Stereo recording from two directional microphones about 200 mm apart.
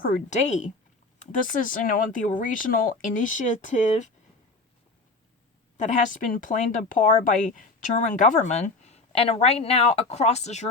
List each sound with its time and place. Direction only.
0.0 s speech: 40° left (ahead or behind)
5.7 s speech: 40° left (ahead or behind)